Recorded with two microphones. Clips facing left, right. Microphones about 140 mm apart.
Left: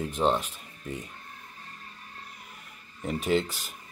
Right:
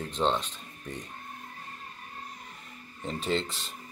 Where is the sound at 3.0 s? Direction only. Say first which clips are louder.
Left 4 dB; 10° left (ahead or behind).